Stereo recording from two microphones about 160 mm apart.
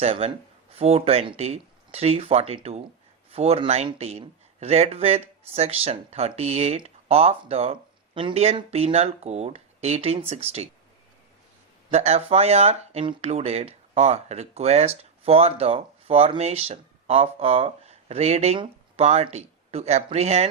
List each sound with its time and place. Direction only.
0.0 s speech: 35° right (ahead or behind)
11.9 s speech: 40° right (ahead or behind)